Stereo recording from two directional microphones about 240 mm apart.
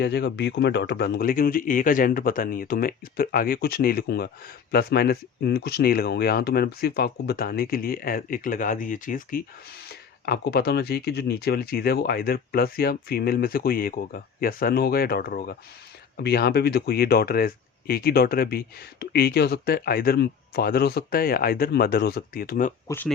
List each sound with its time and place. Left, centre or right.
0.0 s speech: left
22.9 s speech: centre